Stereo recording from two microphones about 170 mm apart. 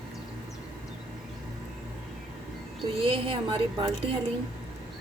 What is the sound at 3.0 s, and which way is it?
Speech, 35° right (ahead or behind).